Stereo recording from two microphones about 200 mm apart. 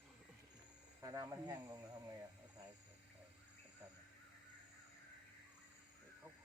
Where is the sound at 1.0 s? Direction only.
15° right (ahead or behind).